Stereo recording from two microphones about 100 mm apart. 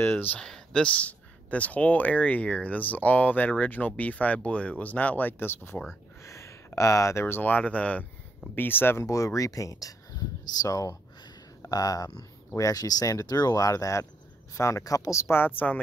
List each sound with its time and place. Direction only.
0.0 s speech: 20° left (ahead or behind)
0.4 s speech: 10° left (ahead or behind)